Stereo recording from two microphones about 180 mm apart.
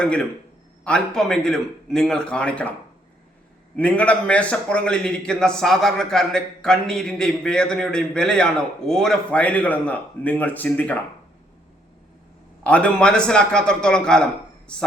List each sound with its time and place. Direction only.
0.0 s a man's voice: 5° left (ahead or behind)
3.8 s a man's voice: 5° left (ahead or behind)
12.6 s a man's voice: 5° left (ahead or behind)